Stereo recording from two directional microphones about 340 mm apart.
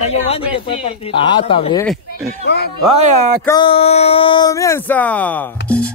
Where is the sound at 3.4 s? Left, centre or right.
Centre.